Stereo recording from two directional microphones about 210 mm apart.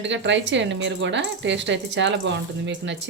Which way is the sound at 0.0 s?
60° right (ahead or behind).